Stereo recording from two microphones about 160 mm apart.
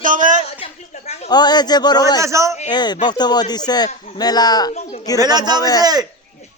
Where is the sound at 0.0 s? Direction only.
55° right (ahead or behind).